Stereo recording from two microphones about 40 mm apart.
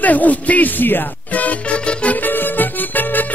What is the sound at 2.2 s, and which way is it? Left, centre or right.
Music, left.